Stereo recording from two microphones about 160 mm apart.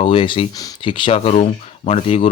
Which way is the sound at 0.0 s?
35° left (ahead or behind).